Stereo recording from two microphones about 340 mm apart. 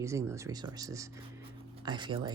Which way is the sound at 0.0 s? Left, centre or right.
Centre.